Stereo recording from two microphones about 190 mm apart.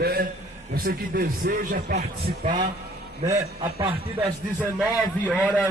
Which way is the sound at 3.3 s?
35° right (ahead or behind).